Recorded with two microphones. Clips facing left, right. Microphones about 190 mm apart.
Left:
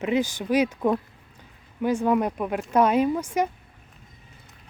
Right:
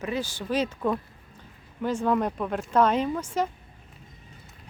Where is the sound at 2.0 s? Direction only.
10° left (ahead or behind).